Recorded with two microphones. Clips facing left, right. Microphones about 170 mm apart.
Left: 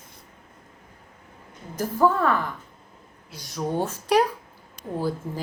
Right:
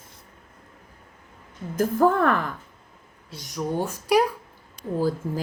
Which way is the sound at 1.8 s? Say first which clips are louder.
Right 2 dB; 50° right (ahead or behind).